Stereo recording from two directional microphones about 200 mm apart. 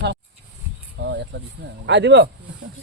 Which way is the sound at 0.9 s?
60° right (ahead or behind).